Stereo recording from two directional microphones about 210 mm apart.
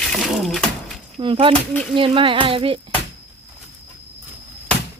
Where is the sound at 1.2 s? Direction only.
25° right (ahead or behind).